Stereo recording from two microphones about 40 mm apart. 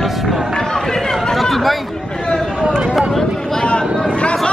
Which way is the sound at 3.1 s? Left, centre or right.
Centre.